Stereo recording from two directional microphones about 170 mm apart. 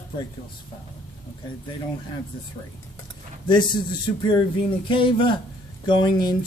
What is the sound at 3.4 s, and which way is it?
Speech, 25° left (ahead or behind).